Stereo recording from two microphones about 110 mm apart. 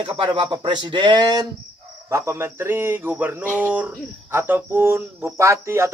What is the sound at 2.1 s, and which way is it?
Speech, 25° right (ahead or behind).